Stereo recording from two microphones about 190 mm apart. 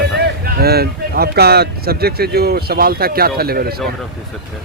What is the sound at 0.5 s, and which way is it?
Speech, 55° right (ahead or behind).